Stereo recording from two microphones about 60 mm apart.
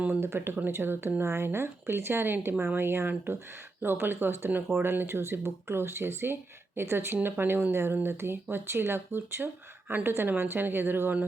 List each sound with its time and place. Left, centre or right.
0.1 s speech: right